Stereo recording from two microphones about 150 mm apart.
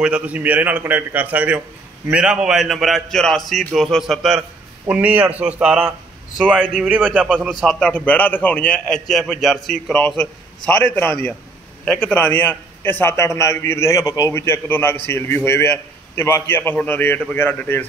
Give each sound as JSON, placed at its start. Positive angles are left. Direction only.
{"t": 0.0, "sound": "a man's voice", "side_deg": -10}
{"t": 7.8, "sound": "a man's voice", "side_deg": 10}